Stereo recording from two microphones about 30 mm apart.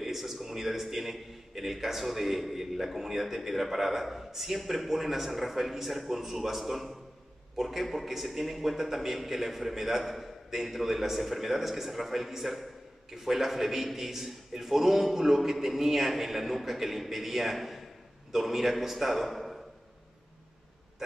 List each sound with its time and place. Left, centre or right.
0.0 s a man's voice: centre